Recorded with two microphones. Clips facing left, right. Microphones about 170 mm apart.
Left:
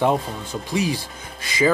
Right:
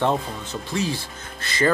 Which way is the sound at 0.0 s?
10° left (ahead or behind).